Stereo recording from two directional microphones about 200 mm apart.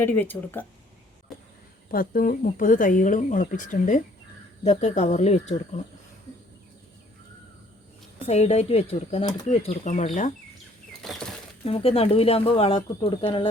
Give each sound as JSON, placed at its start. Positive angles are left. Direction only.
{"t": 0.0, "sound": "speech", "side_deg": 10}
{"t": 1.9, "sound": "speech", "side_deg": 45}
{"t": 8.3, "sound": "speech", "side_deg": 30}
{"t": 9.5, "sound": "speech", "side_deg": 35}
{"t": 11.0, "sound": "speech", "side_deg": 0}
{"t": 11.6, "sound": "speech", "side_deg": 30}